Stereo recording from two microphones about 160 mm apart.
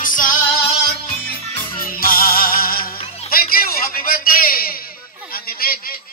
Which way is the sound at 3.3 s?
65° left (ahead or behind).